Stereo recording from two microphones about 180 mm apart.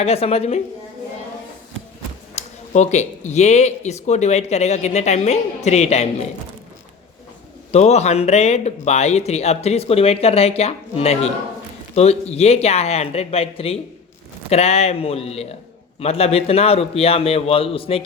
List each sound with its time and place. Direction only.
0.0 s speech: 35° left (ahead or behind)
2.3 s speech: 40° left (ahead or behind)
7.7 s speech: 35° left (ahead or behind)